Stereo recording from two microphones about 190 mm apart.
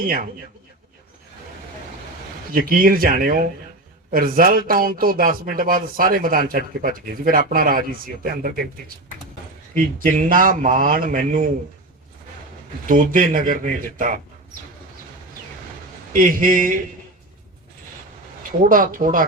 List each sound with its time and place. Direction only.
0.0 s a man's voice: 50° right (ahead or behind)
2.5 s a man's voice: 50° right (ahead or behind)
10.0 s a man's voice: 45° right (ahead or behind)
12.9 s a man's voice: 45° right (ahead or behind)
16.1 s a man's voice: 45° right (ahead or behind)
18.7 s a man's voice: 45° right (ahead or behind)